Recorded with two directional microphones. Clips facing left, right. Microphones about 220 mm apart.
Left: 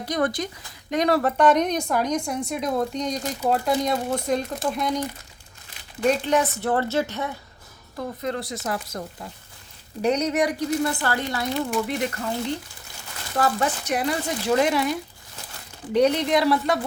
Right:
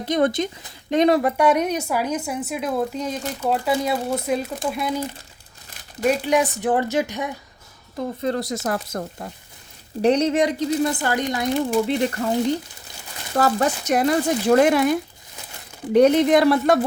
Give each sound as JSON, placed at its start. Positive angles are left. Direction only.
{"t": 0.0, "sound": "speech", "side_deg": -25}
{"t": 7.9, "sound": "speech", "side_deg": -35}
{"t": 10.0, "sound": "speech", "side_deg": -30}
{"t": 11.8, "sound": "speech", "side_deg": -30}
{"t": 13.3, "sound": "speech", "side_deg": -40}